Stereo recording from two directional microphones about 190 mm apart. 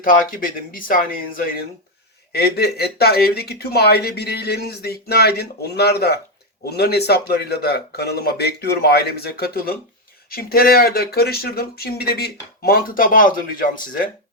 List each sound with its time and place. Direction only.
0.0 s speech: 45° left (ahead or behind)
2.3 s speech: 55° left (ahead or behind)